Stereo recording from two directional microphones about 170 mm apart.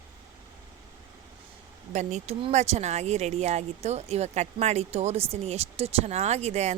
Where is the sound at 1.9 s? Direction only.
45° right (ahead or behind).